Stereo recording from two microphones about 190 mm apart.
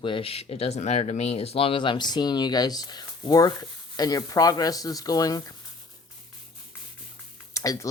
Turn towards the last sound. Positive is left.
turn(degrees=15)  # may be behind; listen again after turning